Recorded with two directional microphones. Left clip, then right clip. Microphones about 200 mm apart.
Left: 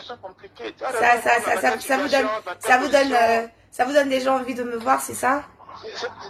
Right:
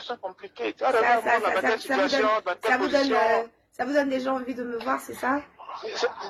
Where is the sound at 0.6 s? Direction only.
30° right (ahead or behind).